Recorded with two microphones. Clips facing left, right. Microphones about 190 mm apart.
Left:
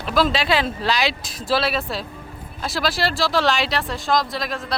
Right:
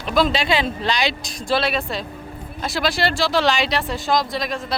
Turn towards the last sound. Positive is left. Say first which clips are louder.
# right 2 dB
turn(degrees=0)  # may be behind; listen again after turning